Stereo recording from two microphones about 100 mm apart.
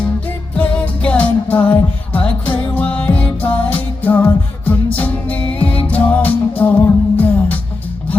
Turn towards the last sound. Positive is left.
turn(degrees=15)  # may be behind; listen again after turning